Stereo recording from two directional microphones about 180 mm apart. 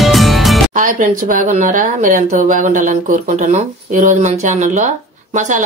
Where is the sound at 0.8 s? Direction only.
45° right (ahead or behind).